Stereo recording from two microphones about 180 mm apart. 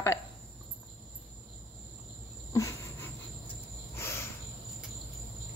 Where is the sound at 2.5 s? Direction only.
15° left (ahead or behind).